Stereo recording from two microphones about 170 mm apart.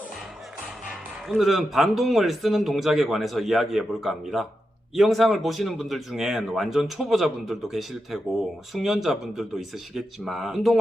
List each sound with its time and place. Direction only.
1.3 s speech: centre (ahead or behind)